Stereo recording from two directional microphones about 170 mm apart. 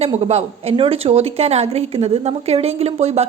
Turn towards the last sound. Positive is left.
turn(degrees=-40)  # may be behind; listen again after turning